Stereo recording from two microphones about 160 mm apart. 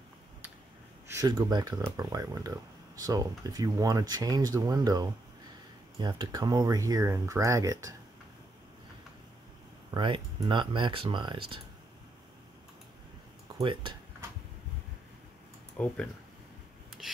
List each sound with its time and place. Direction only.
1.0 s speech: 20° right (ahead or behind)
9.8 s speech: 30° right (ahead or behind)
13.6 s speech: 30° right (ahead or behind)
15.8 s speech: 10° left (ahead or behind)